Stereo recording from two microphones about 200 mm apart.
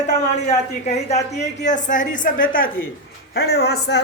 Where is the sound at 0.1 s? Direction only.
35° left (ahead or behind).